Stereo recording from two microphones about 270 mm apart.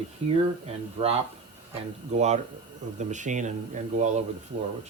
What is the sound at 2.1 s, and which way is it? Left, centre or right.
Speech, right.